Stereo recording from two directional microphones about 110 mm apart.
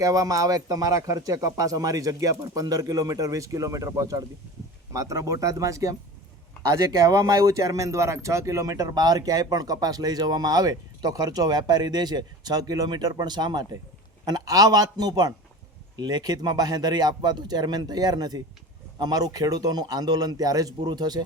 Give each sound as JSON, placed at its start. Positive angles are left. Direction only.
{"t": 0.0, "sound": "speech", "side_deg": -30}